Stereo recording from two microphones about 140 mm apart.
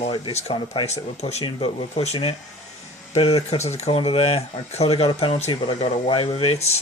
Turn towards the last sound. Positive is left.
turn(degrees=45)  # may be behind; listen again after turning